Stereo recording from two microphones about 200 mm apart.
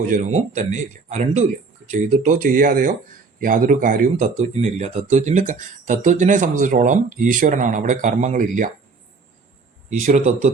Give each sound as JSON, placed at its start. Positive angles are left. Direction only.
{"t": 0.1, "sound": "speech", "side_deg": -35}
{"t": 9.9, "sound": "speech", "side_deg": -40}